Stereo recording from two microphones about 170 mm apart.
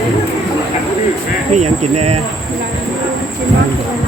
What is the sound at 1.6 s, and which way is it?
Speech, 40° right (ahead or behind).